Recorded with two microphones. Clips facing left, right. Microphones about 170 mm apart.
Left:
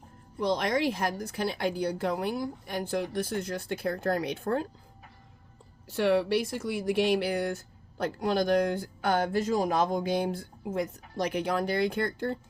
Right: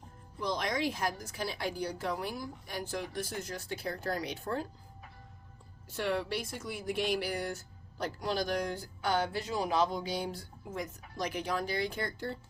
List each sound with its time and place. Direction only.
0.3 s speech: 65° left (ahead or behind)
6.0 s speech: 75° left (ahead or behind); by 12.4 s 55° left (ahead or behind)